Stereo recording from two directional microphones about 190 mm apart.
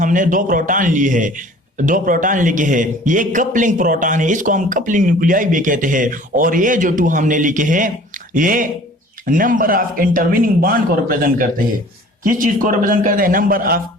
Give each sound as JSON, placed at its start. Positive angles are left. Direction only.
{"t": 0.0, "sound": "a man's voice", "side_deg": -45}